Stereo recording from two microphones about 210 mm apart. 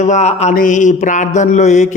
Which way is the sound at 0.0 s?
35° left (ahead or behind).